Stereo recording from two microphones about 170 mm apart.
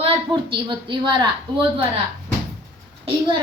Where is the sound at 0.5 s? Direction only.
30° right (ahead or behind).